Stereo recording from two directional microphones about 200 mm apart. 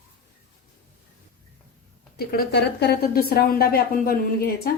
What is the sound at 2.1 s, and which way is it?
A woman's voice, 50° left (ahead or behind).